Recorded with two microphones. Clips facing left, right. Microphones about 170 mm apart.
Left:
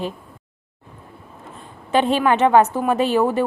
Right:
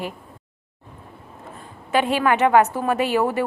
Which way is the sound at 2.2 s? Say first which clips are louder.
Left 1 dB; 20° left (ahead or behind).